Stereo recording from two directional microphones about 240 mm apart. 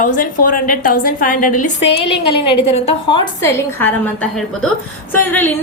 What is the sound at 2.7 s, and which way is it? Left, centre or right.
Speech, left.